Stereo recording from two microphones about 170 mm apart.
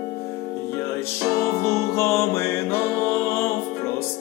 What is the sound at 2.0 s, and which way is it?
Music, 15° left (ahead or behind).